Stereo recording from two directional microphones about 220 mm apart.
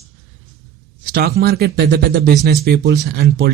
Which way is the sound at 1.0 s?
45° right (ahead or behind).